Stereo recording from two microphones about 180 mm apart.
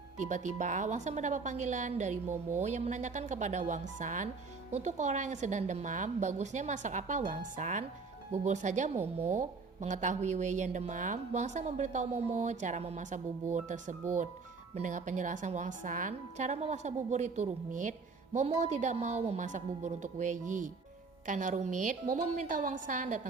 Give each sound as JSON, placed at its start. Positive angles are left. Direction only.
{"t": 0.2, "sound": "a woman's voice", "side_deg": -40}